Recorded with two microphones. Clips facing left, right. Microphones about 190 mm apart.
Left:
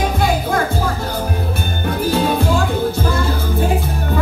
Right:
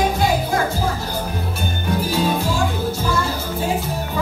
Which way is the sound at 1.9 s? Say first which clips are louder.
Left 3 dB; 55° left (ahead or behind).